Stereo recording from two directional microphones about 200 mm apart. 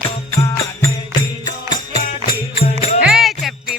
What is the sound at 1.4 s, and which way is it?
Music, 20° left (ahead or behind).